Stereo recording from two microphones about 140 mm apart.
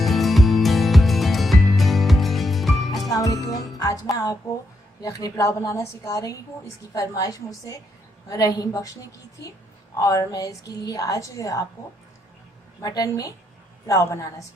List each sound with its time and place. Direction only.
0.0 s music: centre (ahead or behind)
3.1 s music: 25° left (ahead or behind)
4.9 s a woman's voice: 25° left (ahead or behind)
12.8 s a woman's voice: 25° left (ahead or behind)